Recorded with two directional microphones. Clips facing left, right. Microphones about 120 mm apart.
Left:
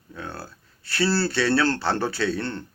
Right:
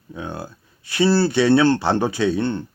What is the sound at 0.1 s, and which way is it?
Speech, 15° right (ahead or behind).